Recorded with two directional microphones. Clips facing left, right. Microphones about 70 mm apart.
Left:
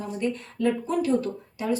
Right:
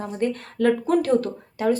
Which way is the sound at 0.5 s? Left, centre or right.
Right.